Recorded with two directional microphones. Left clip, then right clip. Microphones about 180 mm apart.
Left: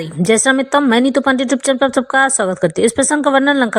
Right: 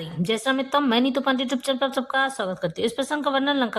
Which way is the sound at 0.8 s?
25° left (ahead or behind).